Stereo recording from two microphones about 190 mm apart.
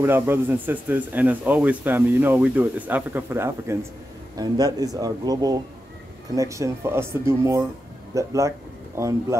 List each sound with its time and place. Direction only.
0.0 s a man's voice: 10° right (ahead or behind)